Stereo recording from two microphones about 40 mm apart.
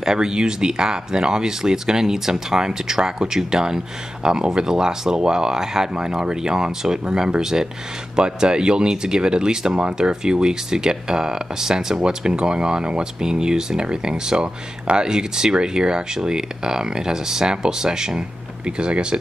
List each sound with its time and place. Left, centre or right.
0.0 s speech: centre